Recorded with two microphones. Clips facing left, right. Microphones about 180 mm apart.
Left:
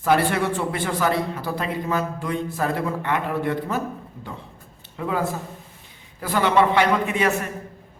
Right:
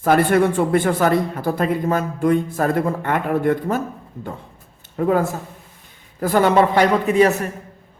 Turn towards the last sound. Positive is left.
turn(degrees=-40)  # may be behind; listen again after turning